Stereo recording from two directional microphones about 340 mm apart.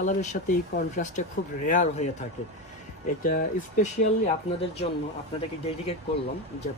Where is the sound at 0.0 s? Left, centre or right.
Left.